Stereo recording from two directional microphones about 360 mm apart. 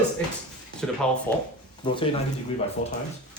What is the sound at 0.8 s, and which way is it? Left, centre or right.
Speech, centre.